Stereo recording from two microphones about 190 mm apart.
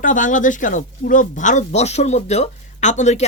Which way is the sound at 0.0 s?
40° left (ahead or behind).